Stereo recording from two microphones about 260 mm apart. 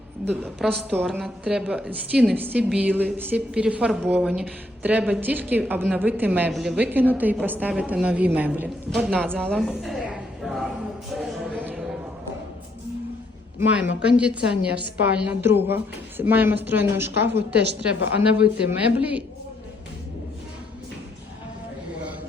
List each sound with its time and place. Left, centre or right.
0.6 s a woman's voice: centre
9.4 s a sound: centre
13.6 s a woman's voice: centre
17.6 s a woman's voice: right
18.3 s a woman's voice: centre